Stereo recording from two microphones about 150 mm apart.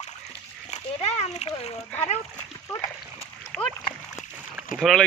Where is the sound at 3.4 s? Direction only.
5° left (ahead or behind).